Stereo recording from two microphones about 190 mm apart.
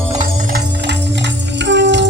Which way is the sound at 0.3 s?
50° right (ahead or behind).